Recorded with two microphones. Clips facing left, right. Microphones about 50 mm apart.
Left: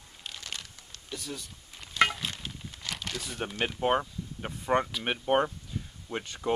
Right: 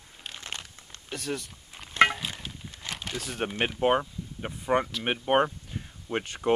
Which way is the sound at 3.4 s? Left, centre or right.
Right.